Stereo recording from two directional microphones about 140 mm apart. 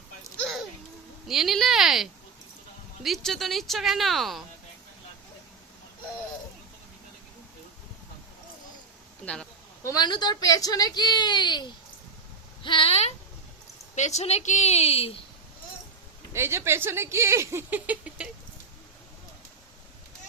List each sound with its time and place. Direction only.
0.3 s a sound: centre (ahead or behind)
1.3 s a woman's voice: centre (ahead or behind)
9.2 s speech: 5° left (ahead or behind)
9.8 s a woman's voice: 30° left (ahead or behind); by 15.1 s 45° left (ahead or behind)
16.3 s speech: 20° right (ahead or behind)